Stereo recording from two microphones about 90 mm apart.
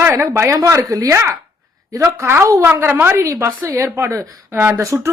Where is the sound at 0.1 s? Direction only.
30° right (ahead or behind).